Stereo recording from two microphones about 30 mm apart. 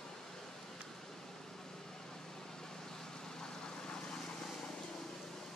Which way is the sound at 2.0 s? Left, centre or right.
Centre.